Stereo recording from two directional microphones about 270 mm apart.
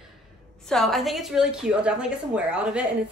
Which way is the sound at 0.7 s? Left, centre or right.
Centre.